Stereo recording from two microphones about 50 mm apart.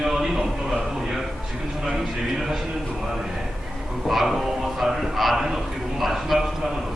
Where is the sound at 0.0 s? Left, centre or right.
Centre.